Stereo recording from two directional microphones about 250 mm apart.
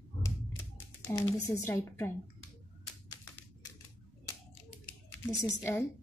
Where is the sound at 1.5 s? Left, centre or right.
Centre.